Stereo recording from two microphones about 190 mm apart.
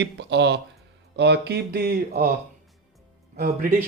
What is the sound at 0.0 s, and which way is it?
Speech, 65° right (ahead or behind).